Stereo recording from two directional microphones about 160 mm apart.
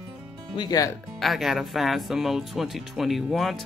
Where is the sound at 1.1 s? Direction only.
Centre (ahead or behind).